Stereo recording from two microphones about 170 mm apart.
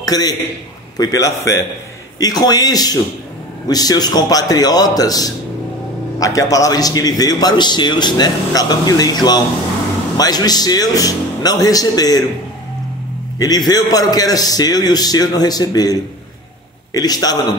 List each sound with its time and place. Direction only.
0.0 s a man's voice: 20° left (ahead or behind)
13.4 s a man's voice: 25° left (ahead or behind)